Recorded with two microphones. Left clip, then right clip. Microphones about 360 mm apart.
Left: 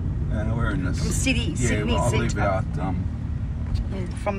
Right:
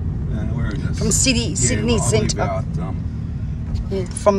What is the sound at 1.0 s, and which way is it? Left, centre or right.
Speech, centre.